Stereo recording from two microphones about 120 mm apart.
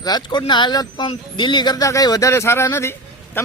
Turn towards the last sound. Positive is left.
turn(degrees=20)  # may be behind; listen again after turning